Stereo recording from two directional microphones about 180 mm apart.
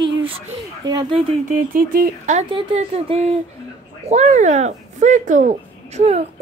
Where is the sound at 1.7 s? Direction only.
50° right (ahead or behind).